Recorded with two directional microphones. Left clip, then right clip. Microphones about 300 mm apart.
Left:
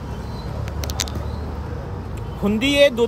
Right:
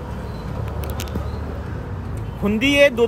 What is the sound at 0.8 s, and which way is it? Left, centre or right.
Vehicle, left.